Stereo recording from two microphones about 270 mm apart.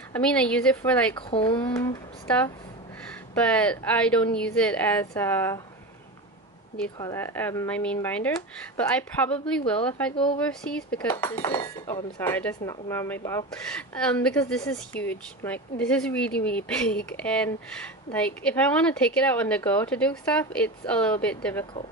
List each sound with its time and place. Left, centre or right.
0.1 s a woman's voice: centre
1.1 s a woman's voice: centre
7.0 s a woman's voice: centre
10.1 s speech: centre
10.4 s a woman's voice: centre
11.3 s a woman's voice: centre